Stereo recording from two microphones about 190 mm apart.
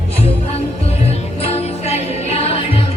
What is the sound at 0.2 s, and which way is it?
Music, 35° left (ahead or behind).